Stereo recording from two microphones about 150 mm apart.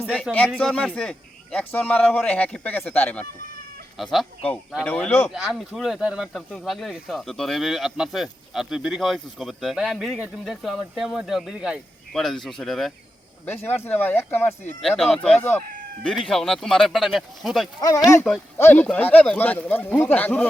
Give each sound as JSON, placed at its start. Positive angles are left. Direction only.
{"t": 0.3, "sound": "a man's voice", "side_deg": 5}
{"t": 3.9, "sound": "a man's voice", "side_deg": 0}
{"t": 5.3, "sound": "speech", "side_deg": 0}
{"t": 13.4, "sound": "a man's voice", "side_deg": 15}
{"t": 14.8, "sound": "speech", "side_deg": 0}
{"t": 15.4, "sound": "a man's voice", "side_deg": 15}
{"t": 16.3, "sound": "speech", "side_deg": 5}
{"t": 17.7, "sound": "a man's voice", "side_deg": 25}